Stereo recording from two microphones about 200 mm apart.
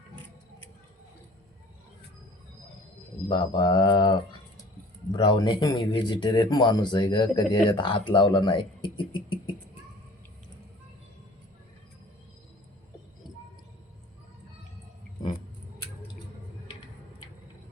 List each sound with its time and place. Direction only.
3.2 s speech: 20° left (ahead or behind)